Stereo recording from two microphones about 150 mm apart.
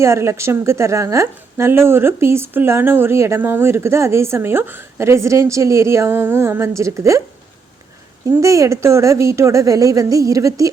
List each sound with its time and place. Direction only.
0.0 s a woman's voice: 20° right (ahead or behind)
8.3 s a woman's voice: 20° right (ahead or behind)